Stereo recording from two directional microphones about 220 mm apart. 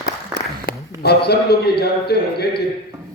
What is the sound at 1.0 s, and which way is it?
A man's voice, 45° left (ahead or behind).